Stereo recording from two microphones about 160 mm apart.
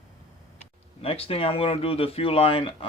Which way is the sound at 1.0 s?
35° left (ahead or behind).